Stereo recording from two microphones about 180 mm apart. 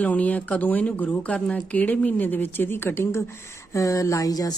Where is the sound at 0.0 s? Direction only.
10° left (ahead or behind).